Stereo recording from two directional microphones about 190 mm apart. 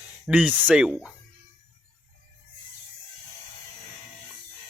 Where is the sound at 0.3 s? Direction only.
5° right (ahead or behind).